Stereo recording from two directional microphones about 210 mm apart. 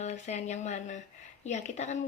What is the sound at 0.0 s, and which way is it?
Speech, 30° left (ahead or behind).